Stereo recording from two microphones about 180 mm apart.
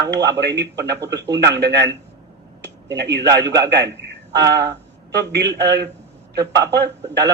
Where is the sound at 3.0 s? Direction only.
70° right (ahead or behind).